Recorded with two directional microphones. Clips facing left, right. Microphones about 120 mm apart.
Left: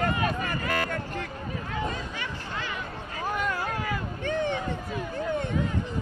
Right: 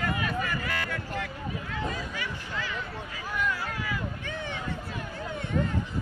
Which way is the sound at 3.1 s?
50° left (ahead or behind).